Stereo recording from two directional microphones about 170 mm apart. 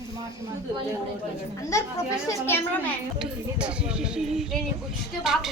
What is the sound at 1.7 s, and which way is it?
Speech, 15° left (ahead or behind).